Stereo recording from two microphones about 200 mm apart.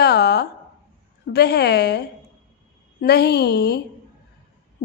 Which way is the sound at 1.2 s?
55° left (ahead or behind).